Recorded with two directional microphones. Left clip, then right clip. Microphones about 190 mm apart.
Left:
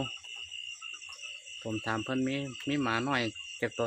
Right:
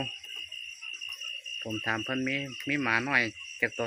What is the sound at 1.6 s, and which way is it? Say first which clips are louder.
Speech: right 2 dB; centre (ahead or behind).